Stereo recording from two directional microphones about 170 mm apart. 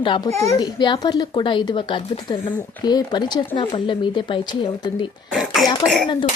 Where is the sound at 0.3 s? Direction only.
15° left (ahead or behind).